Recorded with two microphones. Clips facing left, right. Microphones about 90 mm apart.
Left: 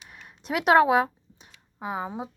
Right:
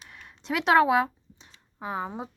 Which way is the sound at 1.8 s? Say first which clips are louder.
Left 1 dB; 10° left (ahead or behind).